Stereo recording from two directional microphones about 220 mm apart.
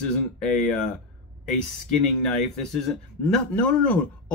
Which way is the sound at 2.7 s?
Centre (ahead or behind).